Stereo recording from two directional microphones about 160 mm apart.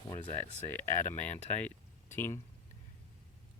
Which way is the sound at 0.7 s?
15° left (ahead or behind).